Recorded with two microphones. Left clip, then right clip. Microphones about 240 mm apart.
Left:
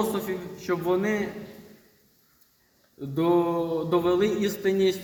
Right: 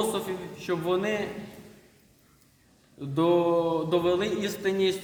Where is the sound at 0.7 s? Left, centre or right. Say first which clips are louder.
Left 2 dB; centre.